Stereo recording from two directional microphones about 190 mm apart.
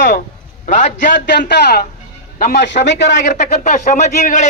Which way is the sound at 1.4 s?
60° left (ahead or behind).